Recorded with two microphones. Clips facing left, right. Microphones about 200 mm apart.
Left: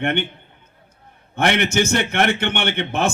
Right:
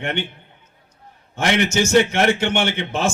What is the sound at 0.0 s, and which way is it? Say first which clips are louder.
Speech: left 4 dB; 60° left (ahead or behind).